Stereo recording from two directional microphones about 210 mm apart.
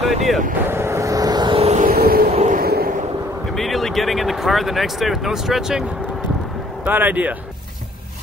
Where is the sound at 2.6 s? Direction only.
45° right (ahead or behind).